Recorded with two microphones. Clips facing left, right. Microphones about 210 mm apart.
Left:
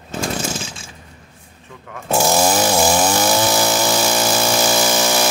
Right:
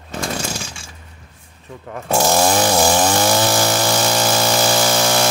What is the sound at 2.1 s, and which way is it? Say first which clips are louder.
Chainsaw: even; 5° left (ahead or behind).